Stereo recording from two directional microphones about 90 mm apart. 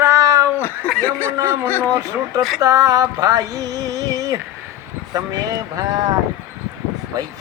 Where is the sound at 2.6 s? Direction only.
40° right (ahead or behind).